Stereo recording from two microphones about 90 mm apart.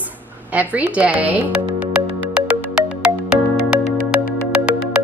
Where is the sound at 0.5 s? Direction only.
15° right (ahead or behind).